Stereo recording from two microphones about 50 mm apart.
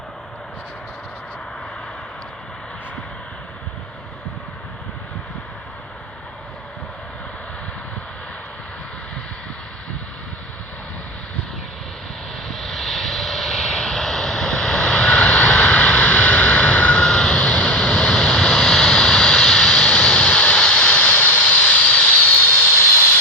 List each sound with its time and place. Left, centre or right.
12.5 s vehicle: centre; by 22.7 s left
22.7 s vehicle: left